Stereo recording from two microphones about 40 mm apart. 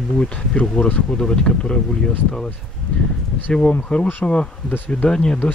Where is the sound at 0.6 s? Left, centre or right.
Centre.